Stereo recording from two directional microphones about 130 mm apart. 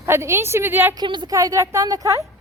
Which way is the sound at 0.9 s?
35° right (ahead or behind).